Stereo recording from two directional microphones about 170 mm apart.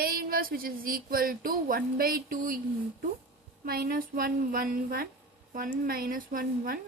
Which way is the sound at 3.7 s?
60° right (ahead or behind).